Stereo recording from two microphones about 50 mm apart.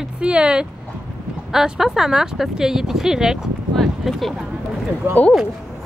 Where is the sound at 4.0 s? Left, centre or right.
Centre.